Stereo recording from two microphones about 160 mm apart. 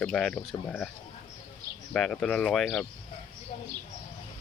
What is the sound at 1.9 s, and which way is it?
Speech, 5° left (ahead or behind).